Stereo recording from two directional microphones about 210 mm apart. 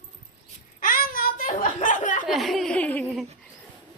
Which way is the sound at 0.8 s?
40° left (ahead or behind).